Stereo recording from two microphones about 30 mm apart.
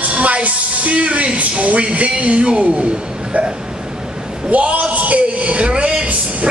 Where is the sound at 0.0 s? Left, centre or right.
Right.